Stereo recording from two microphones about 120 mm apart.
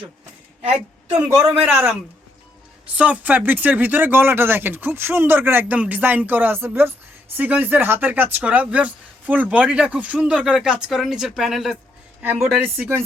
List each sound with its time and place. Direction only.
1.6 s speech: 15° right (ahead or behind)
12.2 s speech: 15° right (ahead or behind)